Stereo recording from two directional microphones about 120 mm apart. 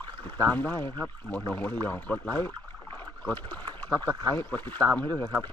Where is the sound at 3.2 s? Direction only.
15° left (ahead or behind).